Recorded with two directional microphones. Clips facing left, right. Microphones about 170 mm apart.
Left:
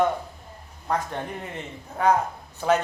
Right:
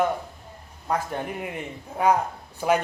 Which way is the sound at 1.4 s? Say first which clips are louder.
Right 3 dB; 10° right (ahead or behind).